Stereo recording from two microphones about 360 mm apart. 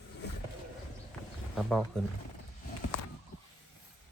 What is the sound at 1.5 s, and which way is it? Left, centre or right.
Speech, centre.